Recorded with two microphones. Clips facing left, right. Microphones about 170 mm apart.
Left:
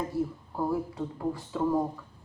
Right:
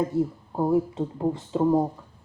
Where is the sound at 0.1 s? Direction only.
20° right (ahead or behind).